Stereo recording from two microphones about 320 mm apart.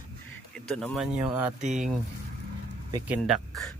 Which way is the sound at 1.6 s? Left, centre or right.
Right.